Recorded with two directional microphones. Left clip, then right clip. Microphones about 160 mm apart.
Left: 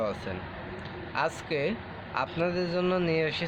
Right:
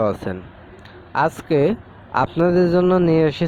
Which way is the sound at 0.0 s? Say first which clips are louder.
Right 10 dB; 60° right (ahead or behind).